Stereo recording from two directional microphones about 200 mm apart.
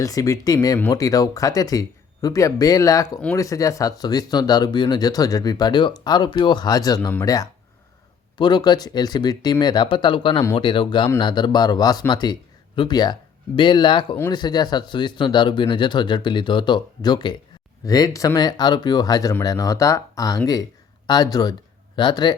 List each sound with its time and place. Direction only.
0.0 s speech: 15° left (ahead or behind)